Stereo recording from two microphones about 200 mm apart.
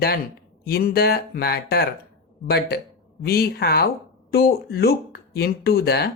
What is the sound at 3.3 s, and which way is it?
Speech, 50° left (ahead or behind).